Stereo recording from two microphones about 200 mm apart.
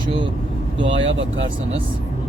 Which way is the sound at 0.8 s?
65° right (ahead or behind).